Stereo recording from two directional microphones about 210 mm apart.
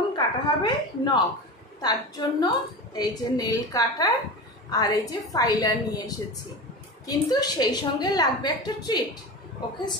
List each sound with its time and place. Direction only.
0.1 s a woman's voice: 20° left (ahead or behind)